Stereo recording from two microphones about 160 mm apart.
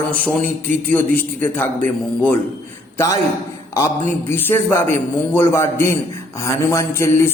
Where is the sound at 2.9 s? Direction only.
20° left (ahead or behind).